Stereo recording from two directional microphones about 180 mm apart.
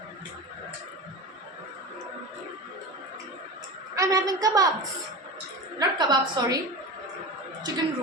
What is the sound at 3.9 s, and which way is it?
Speech, 20° right (ahead or behind).